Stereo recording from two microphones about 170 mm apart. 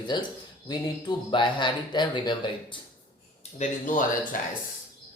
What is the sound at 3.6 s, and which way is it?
Speech, 50° left (ahead or behind).